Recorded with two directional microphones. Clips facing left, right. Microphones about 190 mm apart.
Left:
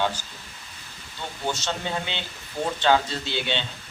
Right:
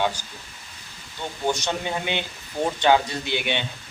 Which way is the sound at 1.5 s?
15° right (ahead or behind).